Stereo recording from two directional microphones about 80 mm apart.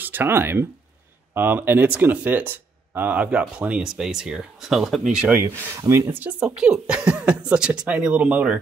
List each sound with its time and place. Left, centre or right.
0.0 s speech: right; by 5.2 s centre
5.8 s speech: right
6.4 s speech: centre